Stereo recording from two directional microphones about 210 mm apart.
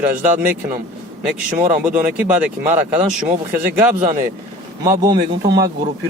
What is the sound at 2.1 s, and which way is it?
Speech, 5° right (ahead or behind).